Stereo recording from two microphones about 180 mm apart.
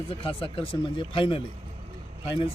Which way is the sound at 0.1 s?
30° left (ahead or behind).